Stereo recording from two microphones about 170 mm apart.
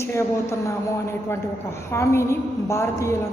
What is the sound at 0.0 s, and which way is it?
A woman's voice, 15° left (ahead or behind).